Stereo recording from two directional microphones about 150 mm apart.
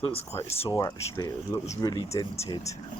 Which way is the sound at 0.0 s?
40° left (ahead or behind).